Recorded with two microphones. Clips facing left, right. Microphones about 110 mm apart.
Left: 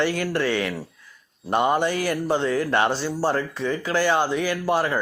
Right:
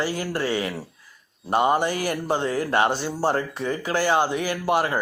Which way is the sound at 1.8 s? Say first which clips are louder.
Left 2 dB; 45° right (ahead or behind).